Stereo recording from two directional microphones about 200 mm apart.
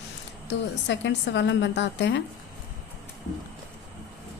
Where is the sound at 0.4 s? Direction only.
60° left (ahead or behind).